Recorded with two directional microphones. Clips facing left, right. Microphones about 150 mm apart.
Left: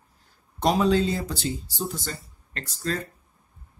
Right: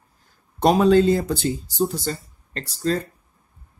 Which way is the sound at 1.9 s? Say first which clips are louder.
Right 7 dB; 35° right (ahead or behind).